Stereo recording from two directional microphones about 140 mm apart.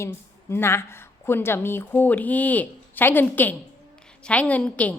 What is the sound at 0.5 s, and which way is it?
A woman's voice, 20° left (ahead or behind).